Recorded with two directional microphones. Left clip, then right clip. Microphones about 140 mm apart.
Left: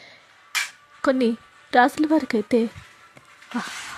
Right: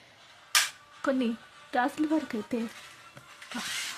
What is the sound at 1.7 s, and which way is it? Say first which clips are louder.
Speech: left 10 dB; 50° left (ahead or behind).